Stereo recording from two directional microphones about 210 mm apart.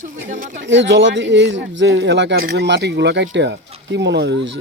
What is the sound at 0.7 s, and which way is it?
Speech, 60° right (ahead or behind).